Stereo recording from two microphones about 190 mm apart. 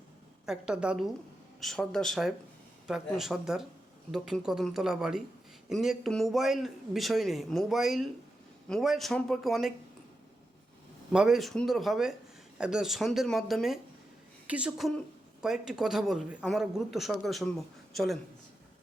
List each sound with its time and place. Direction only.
0.4 s speech: 5° right (ahead or behind)
11.1 s a woman's voice: 5° right (ahead or behind)